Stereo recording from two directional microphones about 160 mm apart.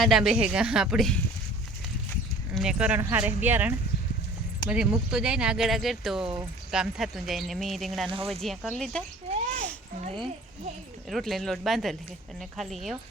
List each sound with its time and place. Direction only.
0.0 s speech: centre (ahead or behind)
2.5 s speech: 5° right (ahead or behind)
9.3 s a sound: 50° right (ahead or behind)
11.1 s speech: centre (ahead or behind)